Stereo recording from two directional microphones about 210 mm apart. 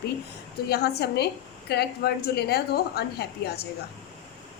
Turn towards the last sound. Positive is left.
turn(degrees=50)  # may be behind; listen again after turning